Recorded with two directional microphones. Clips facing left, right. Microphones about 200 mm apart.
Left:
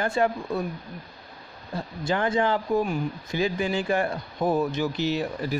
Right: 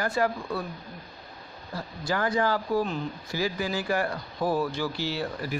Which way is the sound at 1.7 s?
25° left (ahead or behind).